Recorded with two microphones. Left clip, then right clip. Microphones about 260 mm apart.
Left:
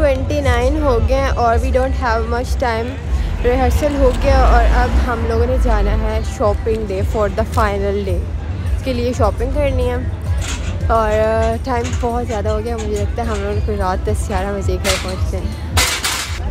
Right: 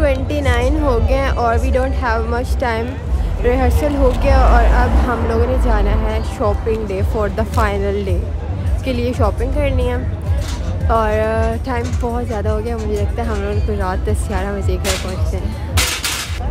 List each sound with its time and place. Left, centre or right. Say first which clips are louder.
0.0 s speech: left 2 dB; centre
15.7 s music: left 2 dB; left